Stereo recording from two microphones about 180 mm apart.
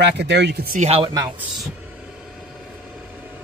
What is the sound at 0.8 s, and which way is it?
Speech, 35° right (ahead or behind).